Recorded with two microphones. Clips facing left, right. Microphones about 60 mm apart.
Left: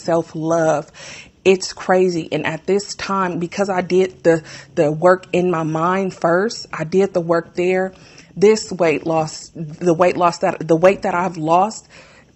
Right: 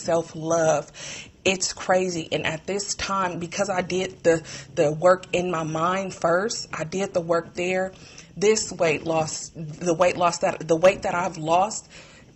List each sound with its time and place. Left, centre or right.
0.0 s speech: left